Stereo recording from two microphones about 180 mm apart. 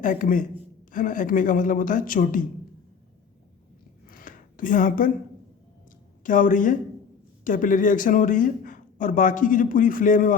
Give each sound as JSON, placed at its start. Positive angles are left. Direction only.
{"t": 0.0, "sound": "a man's voice", "side_deg": 50}
{"t": 4.1, "sound": "a sound", "side_deg": 50}
{"t": 6.2, "sound": "a man's voice", "side_deg": 45}